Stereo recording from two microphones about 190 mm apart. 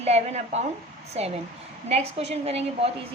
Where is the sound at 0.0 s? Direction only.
35° right (ahead or behind).